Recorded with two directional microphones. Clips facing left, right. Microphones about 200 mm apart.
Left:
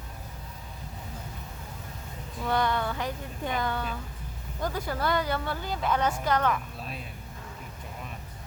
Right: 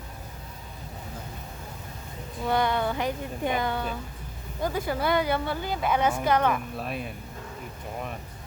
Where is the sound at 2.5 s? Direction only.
15° right (ahead or behind).